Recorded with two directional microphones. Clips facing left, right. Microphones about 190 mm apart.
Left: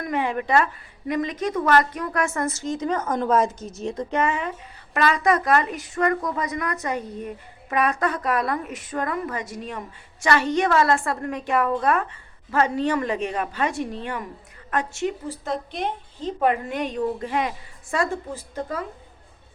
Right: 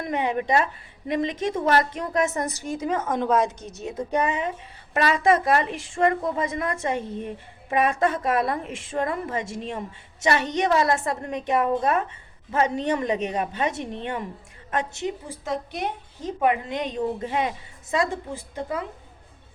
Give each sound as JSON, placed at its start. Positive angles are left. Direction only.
{"t": 0.0, "sound": "a woman's voice", "side_deg": -20}
{"t": 4.1, "sound": "a woman's voice", "side_deg": -15}